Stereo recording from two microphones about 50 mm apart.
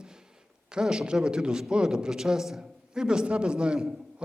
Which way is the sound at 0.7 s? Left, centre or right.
Centre.